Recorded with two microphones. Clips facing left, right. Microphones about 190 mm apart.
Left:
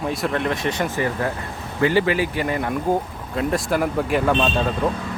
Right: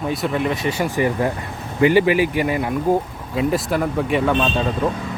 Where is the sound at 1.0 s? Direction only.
15° right (ahead or behind).